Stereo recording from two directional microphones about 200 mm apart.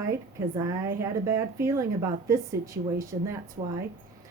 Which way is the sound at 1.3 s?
15° right (ahead or behind).